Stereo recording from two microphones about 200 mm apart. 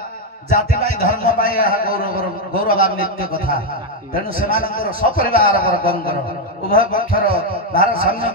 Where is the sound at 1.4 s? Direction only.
45° left (ahead or behind).